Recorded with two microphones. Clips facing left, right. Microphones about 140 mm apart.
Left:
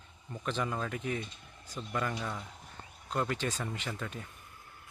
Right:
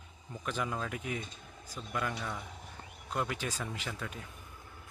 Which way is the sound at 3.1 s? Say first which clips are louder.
Left 2 dB; 5° right (ahead or behind).